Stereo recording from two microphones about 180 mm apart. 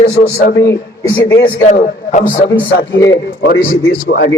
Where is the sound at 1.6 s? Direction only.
40° left (ahead or behind).